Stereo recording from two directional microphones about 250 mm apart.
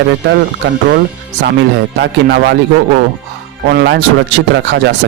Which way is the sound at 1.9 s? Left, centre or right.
Right.